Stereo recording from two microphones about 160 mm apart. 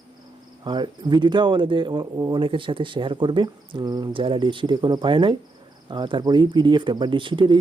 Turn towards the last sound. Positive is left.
turn(degrees=-30)  # may be behind; listen again after turning